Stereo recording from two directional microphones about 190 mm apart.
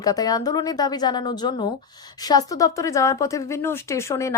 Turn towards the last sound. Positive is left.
turn(degrees=15)  # may be behind; listen again after turning